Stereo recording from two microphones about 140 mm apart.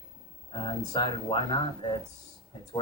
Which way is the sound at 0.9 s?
35° left (ahead or behind).